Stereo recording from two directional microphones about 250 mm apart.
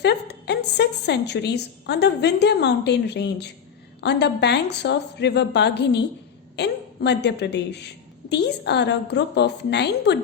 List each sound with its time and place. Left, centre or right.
0.0 s a woman's voice: left